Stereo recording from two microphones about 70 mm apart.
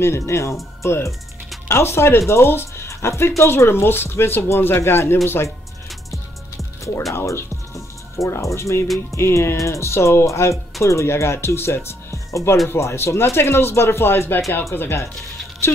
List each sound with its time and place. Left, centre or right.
0.0 s speech: left
7.2 s music: left
9.1 s speech: left